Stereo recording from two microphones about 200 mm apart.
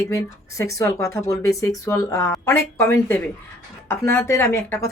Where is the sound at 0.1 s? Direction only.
15° left (ahead or behind).